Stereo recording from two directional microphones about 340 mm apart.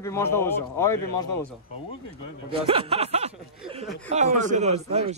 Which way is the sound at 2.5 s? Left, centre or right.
Centre.